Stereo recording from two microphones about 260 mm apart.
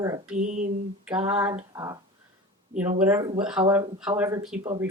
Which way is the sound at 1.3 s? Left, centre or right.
Centre.